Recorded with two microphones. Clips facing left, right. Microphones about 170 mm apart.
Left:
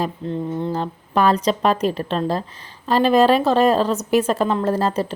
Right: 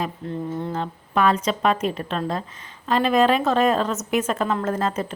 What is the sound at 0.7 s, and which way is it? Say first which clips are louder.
A woman's voice: left 3 dB; 35° left (ahead or behind).